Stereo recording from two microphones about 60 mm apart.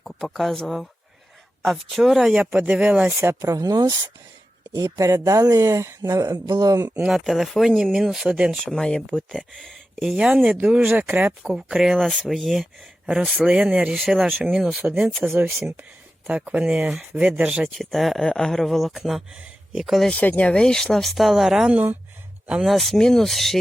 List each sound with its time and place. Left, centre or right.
0.0 s speech: centre
2.3 s speech: centre
3.2 s speech: right
3.5 s speech: right
4.8 s speech: right
7.1 s speech: centre
8.6 s speech: centre; by 11.0 s right
11.4 s speech: centre
17.7 s speech: centre
20.1 s speech: left
20.5 s speech: centre
21.7 s speech: right
22.6 s speech: centre